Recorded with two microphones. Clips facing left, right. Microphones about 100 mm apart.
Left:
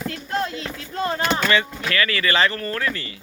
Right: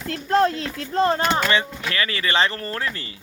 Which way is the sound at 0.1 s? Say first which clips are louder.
Right 13 dB; 40° right (ahead or behind).